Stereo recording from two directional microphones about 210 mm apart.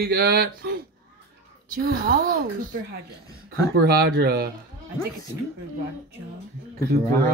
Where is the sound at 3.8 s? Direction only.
45° right (ahead or behind).